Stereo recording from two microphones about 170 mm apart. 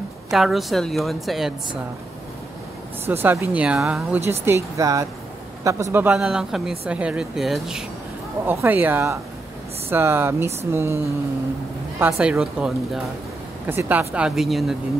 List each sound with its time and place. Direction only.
0.3 s a woman's voice: centre (ahead or behind)
3.1 s a woman's voice: 10° right (ahead or behind)